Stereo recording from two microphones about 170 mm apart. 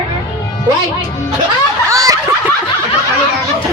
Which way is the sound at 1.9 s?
20° right (ahead or behind).